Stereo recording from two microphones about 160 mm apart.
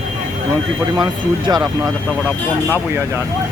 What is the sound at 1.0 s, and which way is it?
Speech, 30° right (ahead or behind).